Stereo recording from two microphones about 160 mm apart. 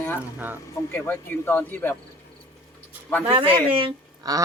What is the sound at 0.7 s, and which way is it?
Speech, 15° left (ahead or behind).